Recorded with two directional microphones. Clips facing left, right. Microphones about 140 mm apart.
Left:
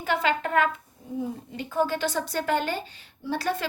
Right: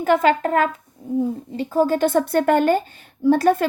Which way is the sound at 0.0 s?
45° right (ahead or behind).